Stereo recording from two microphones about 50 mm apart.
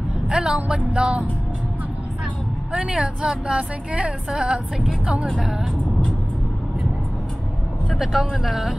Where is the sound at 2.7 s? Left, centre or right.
Right.